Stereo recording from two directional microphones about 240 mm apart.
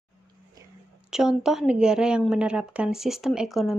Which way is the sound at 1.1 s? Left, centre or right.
Centre.